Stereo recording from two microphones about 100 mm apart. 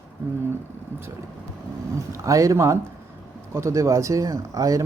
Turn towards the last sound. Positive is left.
turn(degrees=-35)  # may be behind; listen again after turning